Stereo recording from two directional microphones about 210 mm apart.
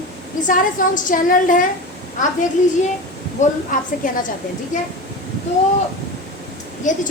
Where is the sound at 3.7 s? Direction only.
40° left (ahead or behind).